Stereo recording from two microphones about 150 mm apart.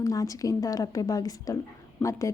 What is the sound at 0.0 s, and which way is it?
A woman's voice, 20° left (ahead or behind).